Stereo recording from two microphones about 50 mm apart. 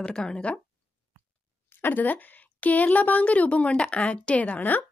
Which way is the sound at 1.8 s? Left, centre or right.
Left.